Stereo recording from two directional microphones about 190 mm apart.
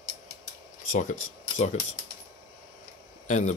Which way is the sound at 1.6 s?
40° left (ahead or behind).